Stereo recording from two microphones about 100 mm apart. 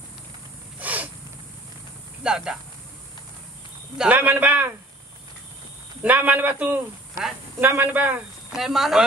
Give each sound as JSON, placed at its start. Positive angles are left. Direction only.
{"t": 0.7, "sound": "snort", "side_deg": -15}
{"t": 2.2, "sound": "a man's voice", "side_deg": -5}
{"t": 4.0, "sound": "a man's voice", "side_deg": -15}
{"t": 6.0, "sound": "a man's voice", "side_deg": -15}
{"t": 8.5, "sound": "speech", "side_deg": -5}